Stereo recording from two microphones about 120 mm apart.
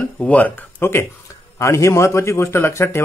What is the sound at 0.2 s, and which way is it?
A man's voice, 10° left (ahead or behind).